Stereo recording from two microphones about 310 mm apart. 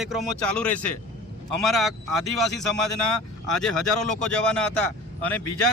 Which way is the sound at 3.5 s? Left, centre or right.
Centre.